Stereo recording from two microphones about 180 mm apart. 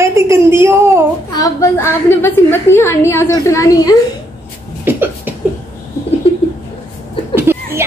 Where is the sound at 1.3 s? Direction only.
20° left (ahead or behind).